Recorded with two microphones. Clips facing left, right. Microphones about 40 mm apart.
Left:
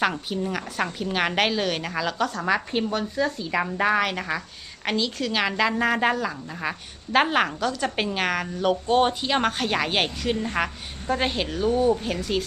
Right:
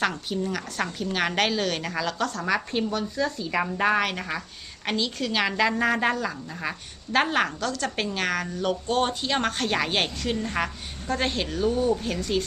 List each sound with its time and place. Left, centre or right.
0.0 s a woman's voice: centre
2.9 s speech: left
3.5 s a woman's voice: centre